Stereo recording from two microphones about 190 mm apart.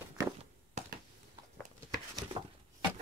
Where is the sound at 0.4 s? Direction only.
35° right (ahead or behind).